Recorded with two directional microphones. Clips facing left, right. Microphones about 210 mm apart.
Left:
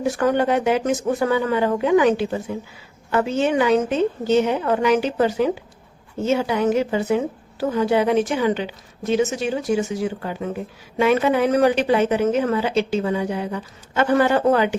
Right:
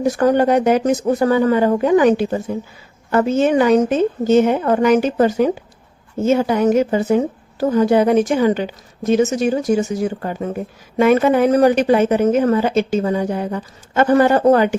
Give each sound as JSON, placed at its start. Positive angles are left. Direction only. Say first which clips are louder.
{"t": 0.0, "sound": "a woman's voice", "louder": "right 5 dB", "side_deg": -40}